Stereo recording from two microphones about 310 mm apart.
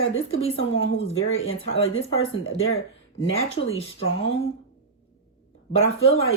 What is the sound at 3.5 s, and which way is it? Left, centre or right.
Speech, centre.